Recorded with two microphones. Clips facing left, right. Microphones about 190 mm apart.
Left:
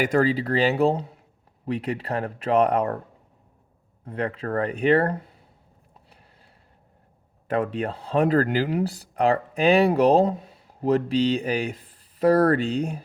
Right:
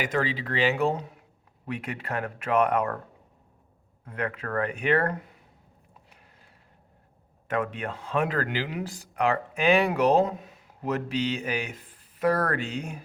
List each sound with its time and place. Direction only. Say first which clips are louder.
0.0 s speech: left 7 dB; 45° left (ahead or behind)
4.0 s speech: left 4 dB; 30° left (ahead or behind)
7.4 s speech: left 4 dB; 35° left (ahead or behind)